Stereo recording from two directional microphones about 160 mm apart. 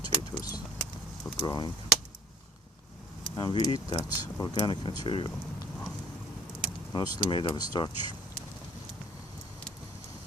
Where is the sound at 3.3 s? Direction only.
25° left (ahead or behind).